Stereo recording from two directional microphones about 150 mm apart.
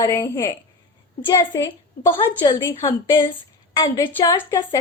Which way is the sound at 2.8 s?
30° left (ahead or behind).